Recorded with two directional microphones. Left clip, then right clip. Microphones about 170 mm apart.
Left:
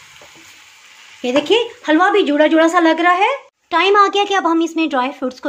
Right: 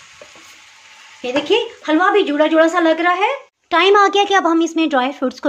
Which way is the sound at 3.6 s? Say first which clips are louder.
Even; 10° right (ahead or behind).